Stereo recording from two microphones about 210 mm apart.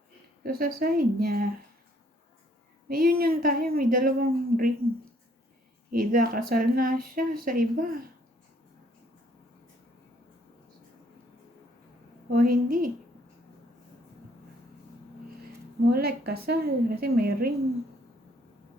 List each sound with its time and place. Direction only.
0.4 s speech: 45° right (ahead or behind)
2.9 s speech: 45° right (ahead or behind)
5.9 s speech: 45° right (ahead or behind)
12.3 s speech: 45° right (ahead or behind)
15.9 s speech: 45° right (ahead or behind)